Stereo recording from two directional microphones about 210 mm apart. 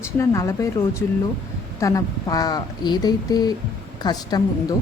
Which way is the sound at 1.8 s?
15° left (ahead or behind).